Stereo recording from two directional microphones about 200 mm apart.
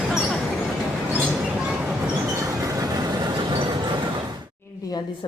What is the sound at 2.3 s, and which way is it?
Vehicle, 15° right (ahead or behind).